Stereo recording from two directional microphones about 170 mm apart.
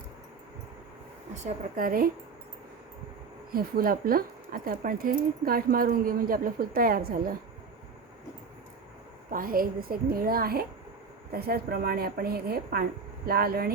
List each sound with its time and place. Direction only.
1.4 s speech: 50° right (ahead or behind)
3.5 s speech: 60° right (ahead or behind)
9.3 s speech: 55° right (ahead or behind)